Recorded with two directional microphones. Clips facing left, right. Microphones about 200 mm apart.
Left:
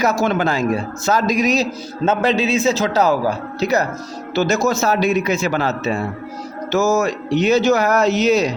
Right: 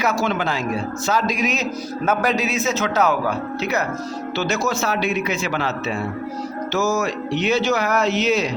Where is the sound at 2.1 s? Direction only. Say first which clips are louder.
Left 4 dB; 25° left (ahead or behind).